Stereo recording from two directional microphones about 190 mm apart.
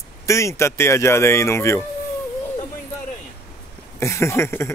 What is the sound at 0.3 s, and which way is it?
Speech, 15° left (ahead or behind).